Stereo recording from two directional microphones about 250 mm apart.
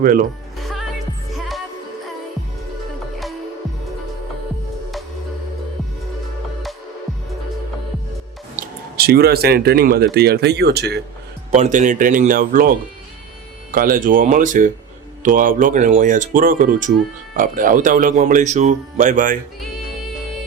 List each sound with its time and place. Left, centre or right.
0.0 s speech: right
8.5 s speech: right
11.5 s speech: right